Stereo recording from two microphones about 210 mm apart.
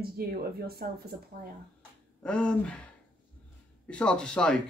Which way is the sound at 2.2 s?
5° left (ahead or behind).